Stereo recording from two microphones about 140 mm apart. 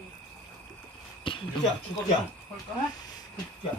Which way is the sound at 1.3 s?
40° left (ahead or behind).